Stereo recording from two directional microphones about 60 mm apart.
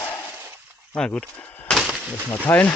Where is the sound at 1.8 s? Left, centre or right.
Centre.